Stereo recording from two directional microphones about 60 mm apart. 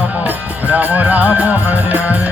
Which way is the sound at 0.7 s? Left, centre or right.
Right.